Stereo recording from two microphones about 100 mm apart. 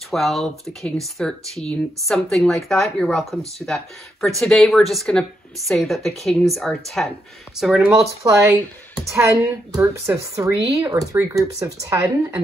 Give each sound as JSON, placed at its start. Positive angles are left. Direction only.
{"t": 0.1, "sound": "speech", "side_deg": 0}
{"t": 8.2, "sound": "speech", "side_deg": -35}